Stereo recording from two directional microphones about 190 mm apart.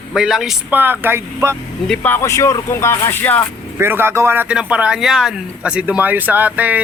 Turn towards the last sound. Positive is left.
turn(degrees=-10)  # may be behind; listen again after turning